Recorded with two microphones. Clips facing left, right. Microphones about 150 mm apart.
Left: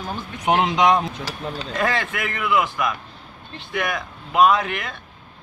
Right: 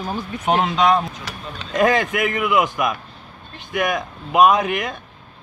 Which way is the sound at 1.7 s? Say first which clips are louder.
Right 7 dB; 15° right (ahead or behind).